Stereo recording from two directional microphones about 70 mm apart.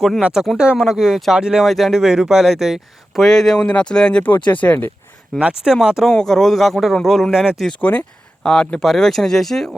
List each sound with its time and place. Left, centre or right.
0.2 s speech: centre; by 4.9 s left
5.4 s speech: centre
5.7 s speech: centre
6.1 s speech: centre
7.8 s speech: left; by 9.7 s centre